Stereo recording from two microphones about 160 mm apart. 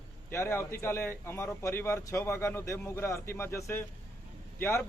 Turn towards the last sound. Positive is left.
turn(degrees=15)  # may be behind; listen again after turning